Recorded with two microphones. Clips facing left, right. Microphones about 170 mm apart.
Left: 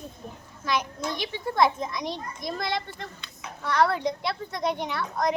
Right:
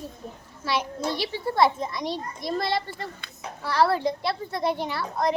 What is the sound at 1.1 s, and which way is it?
A child's voice, 5° right (ahead or behind).